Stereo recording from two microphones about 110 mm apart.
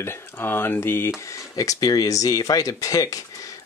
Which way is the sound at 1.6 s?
30° left (ahead or behind).